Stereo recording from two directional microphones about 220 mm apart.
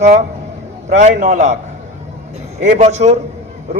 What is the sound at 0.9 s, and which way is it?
Speech, 35° right (ahead or behind).